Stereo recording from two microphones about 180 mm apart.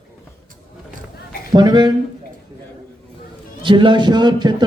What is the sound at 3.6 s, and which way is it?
A man's voice, 25° right (ahead or behind).